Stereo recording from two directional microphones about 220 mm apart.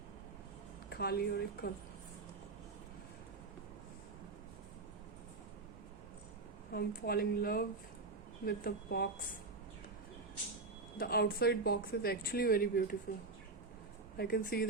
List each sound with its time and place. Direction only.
0.9 s speech: 45° left (ahead or behind)
6.7 s speech: 45° left (ahead or behind)
10.9 s speech: 45° left (ahead or behind)
14.2 s speech: 45° left (ahead or behind)